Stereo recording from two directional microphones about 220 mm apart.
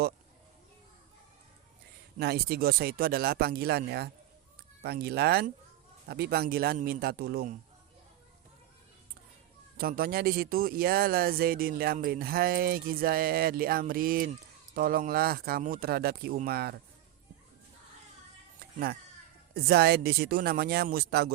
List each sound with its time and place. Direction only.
2.1 s speech: 45° right (ahead or behind)
9.7 s speech: 40° right (ahead or behind)
19.5 s speech: 45° right (ahead or behind)